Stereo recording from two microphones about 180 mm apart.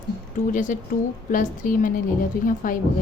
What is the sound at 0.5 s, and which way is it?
A woman's voice, 45° left (ahead or behind).